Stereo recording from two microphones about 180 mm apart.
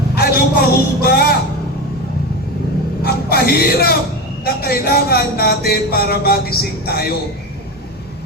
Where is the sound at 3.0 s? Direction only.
60° left (ahead or behind).